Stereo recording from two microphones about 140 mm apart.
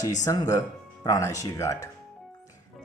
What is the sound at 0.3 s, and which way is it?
Speech, 25° left (ahead or behind).